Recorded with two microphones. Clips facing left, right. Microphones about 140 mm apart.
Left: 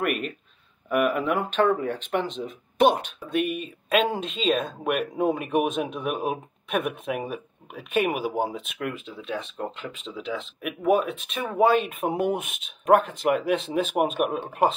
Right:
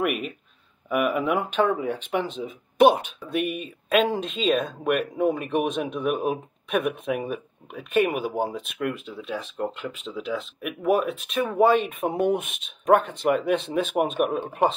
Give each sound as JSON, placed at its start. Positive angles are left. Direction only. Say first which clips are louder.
{"t": 0.0, "sound": "speech", "louder": "right 1 dB", "side_deg": -5}
{"t": 5.1, "sound": "speech", "louder": "right 1 dB", "side_deg": 15}
{"t": 5.5, "sound": "speech", "louder": "left 1 dB", "side_deg": 5}